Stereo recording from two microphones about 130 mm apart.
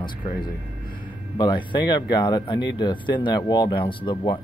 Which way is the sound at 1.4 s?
35° left (ahead or behind).